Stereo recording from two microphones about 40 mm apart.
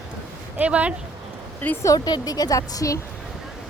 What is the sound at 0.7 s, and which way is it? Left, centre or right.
Speech, right.